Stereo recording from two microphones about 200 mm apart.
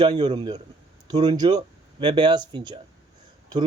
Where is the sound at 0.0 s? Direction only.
25° right (ahead or behind).